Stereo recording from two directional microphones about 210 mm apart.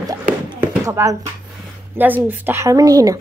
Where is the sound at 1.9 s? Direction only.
10° right (ahead or behind).